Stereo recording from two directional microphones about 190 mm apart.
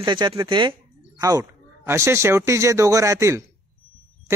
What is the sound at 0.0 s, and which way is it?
Speech, 25° right (ahead or behind).